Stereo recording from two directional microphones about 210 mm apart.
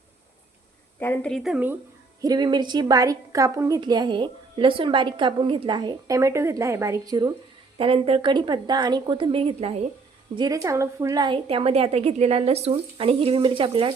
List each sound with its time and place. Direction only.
0.9 s speech: 10° left (ahead or behind); by 1.8 s 10° right (ahead or behind)
2.2 s a woman's voice: 20° right (ahead or behind)